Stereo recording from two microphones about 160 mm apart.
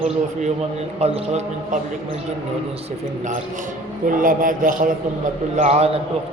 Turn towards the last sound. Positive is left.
turn(degrees=-40)  # may be behind; listen again after turning